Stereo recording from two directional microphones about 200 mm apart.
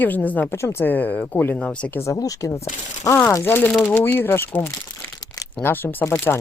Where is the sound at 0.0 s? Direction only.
10° left (ahead or behind).